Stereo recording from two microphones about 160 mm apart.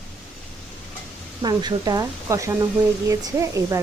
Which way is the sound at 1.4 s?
25° right (ahead or behind).